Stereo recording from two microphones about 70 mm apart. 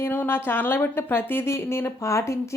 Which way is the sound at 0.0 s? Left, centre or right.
Left.